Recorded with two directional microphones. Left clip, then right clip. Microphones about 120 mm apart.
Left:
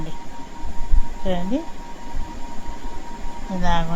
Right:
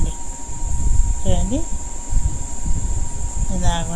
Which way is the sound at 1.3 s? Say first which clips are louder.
Even; 35° right (ahead or behind).